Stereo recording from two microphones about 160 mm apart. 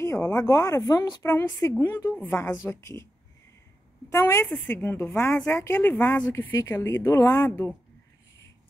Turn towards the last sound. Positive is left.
turn(degrees=15)  # may be behind; listen again after turning